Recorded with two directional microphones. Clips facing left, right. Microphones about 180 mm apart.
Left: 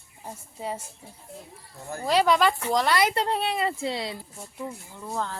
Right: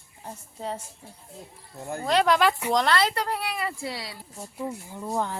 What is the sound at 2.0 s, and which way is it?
Speech, 5° left (ahead or behind).